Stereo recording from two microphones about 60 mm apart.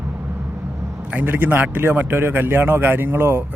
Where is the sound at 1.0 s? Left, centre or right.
Right.